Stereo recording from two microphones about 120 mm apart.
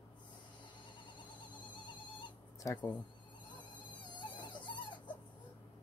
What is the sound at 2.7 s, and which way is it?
Speech, 10° left (ahead or behind).